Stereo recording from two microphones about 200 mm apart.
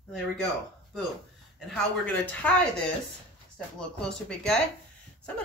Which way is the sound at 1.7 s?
5° left (ahead or behind).